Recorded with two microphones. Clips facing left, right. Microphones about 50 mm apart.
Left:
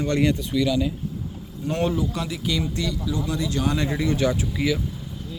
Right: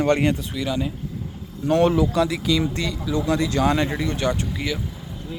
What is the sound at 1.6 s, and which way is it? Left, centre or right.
Speech, right.